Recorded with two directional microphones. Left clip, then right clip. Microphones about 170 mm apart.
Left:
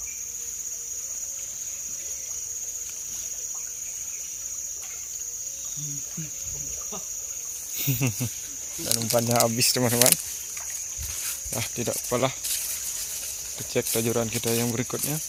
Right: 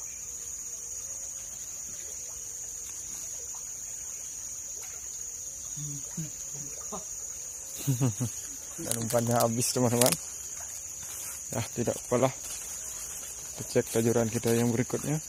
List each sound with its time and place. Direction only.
8.9 s speech: 15° left (ahead or behind); by 10.2 s centre (ahead or behind)
11.5 s speech: 10° right (ahead or behind)
13.7 s speech: 15° right (ahead or behind)